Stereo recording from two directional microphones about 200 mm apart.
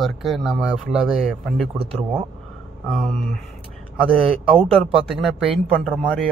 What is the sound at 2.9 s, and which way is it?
Speech, centre (ahead or behind).